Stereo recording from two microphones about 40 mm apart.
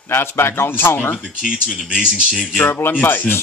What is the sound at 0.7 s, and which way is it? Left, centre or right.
Speech, left.